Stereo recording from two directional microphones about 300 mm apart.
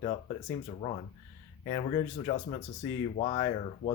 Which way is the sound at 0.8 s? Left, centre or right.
Centre.